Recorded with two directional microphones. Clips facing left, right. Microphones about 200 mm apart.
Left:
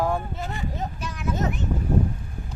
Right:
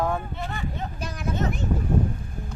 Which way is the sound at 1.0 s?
35° right (ahead or behind).